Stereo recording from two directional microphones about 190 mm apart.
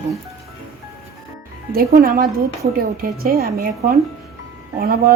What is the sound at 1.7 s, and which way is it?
A child's voice, 50° right (ahead or behind).